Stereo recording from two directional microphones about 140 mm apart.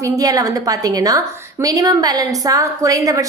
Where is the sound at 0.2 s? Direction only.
25° right (ahead or behind).